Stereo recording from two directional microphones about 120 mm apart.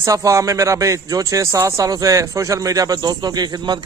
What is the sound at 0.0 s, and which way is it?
A man's voice, 25° right (ahead or behind).